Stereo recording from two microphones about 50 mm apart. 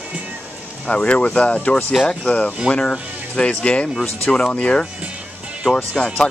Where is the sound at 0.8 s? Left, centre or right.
Left.